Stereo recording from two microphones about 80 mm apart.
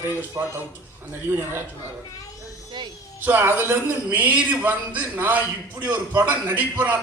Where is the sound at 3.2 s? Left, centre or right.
Right.